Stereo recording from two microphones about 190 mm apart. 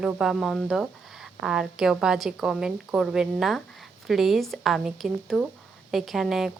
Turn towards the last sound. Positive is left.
turn(degrees=0)  # may be behind; listen again after turning